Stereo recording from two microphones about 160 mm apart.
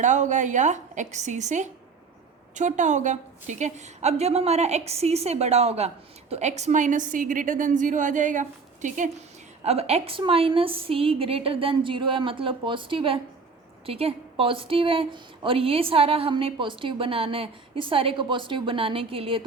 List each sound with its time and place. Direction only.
0.0 s a woman's voice: 50° right (ahead or behind)
9.6 s a woman's voice: 40° right (ahead or behind)